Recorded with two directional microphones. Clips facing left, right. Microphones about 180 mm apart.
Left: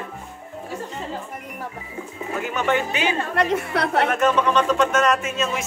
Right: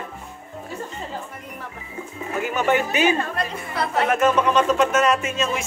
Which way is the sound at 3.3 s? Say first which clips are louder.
Left 7 dB; 75° left (ahead or behind).